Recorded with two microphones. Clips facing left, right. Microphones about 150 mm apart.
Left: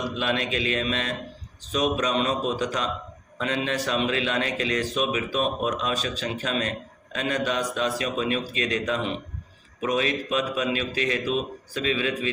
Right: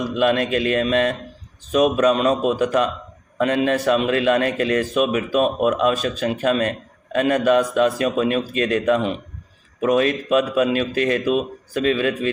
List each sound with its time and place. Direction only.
0.0 s a man's voice: 50° right (ahead or behind)